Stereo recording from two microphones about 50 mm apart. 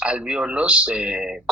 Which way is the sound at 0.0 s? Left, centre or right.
Right.